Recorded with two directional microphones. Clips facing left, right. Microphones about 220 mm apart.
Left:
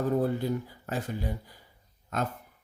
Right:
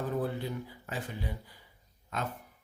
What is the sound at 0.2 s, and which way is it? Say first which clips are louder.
A man's voice: left 6 dB; 45° left (ahead or behind).